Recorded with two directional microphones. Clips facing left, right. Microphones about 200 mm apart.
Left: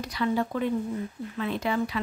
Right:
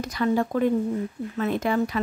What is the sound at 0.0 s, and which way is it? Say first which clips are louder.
Speech: right 4 dB; 45° right (ahead or behind).